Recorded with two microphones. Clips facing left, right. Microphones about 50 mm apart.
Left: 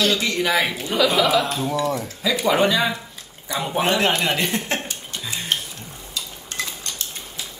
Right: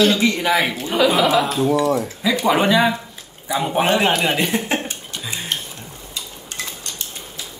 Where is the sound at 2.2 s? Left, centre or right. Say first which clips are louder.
Right 2 dB; centre.